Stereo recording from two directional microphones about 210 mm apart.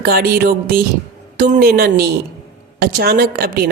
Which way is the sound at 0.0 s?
45° right (ahead or behind).